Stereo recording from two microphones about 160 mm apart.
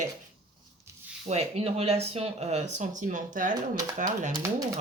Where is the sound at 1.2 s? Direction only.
40° right (ahead or behind).